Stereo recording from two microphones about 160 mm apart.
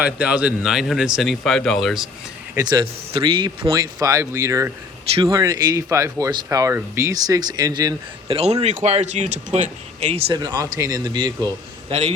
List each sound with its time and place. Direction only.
0.0 s speech: 10° right (ahead or behind)
2.6 s speech: 25° right (ahead or behind)
3.6 s speech: 20° right (ahead or behind)
8.6 s speech: 45° right (ahead or behind)
10.3 s speech: 25° right (ahead or behind)
11.9 s a man's voice: 40° right (ahead or behind)